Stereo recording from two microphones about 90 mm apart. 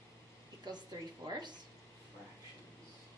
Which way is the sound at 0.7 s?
50° right (ahead or behind).